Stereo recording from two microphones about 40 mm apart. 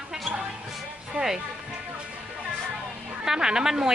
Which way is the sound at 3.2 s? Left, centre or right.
Centre.